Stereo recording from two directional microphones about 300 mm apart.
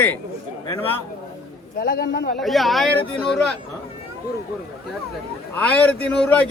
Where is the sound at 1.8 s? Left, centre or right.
Left.